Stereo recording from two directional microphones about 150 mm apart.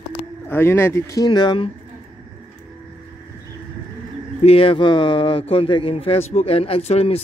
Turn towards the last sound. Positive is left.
turn(degrees=40)  # may be behind; listen again after turning